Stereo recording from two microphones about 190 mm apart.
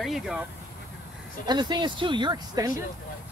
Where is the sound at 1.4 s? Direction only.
20° right (ahead or behind).